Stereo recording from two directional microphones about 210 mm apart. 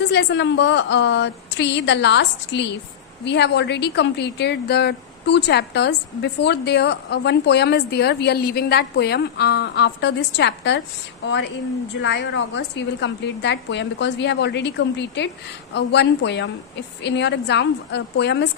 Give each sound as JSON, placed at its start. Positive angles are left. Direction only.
{"t": 0.1, "sound": "a woman's voice", "side_deg": 55}